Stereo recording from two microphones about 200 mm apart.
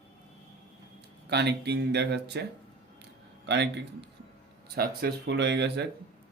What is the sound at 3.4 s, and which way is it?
Speech, 60° right (ahead or behind).